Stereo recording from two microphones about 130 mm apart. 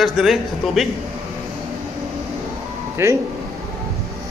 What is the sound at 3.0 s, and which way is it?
Speech, 20° right (ahead or behind).